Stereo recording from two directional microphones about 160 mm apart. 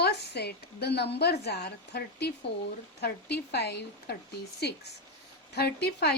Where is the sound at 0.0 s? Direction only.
90° left.